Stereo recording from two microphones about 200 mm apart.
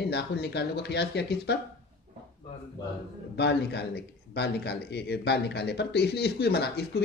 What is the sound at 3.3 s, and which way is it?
Speech, 55° left (ahead or behind).